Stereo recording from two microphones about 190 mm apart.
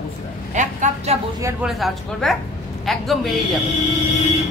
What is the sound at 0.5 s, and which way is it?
Speech, 40° right (ahead or behind).